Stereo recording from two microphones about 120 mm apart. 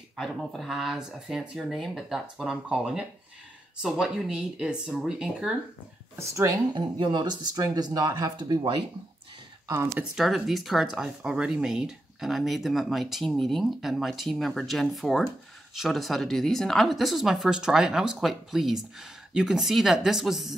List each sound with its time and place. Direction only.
0.1 s speech: centre (ahead or behind)
6.1 s speech: 25° right (ahead or behind)
7.0 s speech: 40° right (ahead or behind)
10.1 s speech: centre (ahead or behind)